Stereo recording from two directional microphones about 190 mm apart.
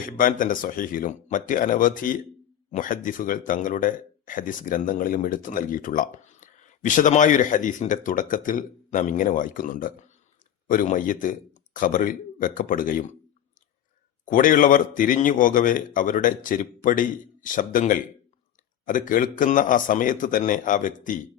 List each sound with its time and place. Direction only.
0.2 s speech: 45° left (ahead or behind)
14.3 s speech: 45° left (ahead or behind)